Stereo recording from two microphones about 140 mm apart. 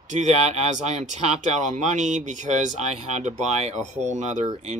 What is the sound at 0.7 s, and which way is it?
Speech, 55° right (ahead or behind).